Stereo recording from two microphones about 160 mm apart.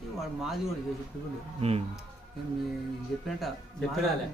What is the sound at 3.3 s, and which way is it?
Mantra, centre (ahead or behind).